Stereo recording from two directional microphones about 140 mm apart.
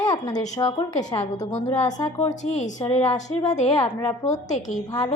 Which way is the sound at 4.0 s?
20° left (ahead or behind).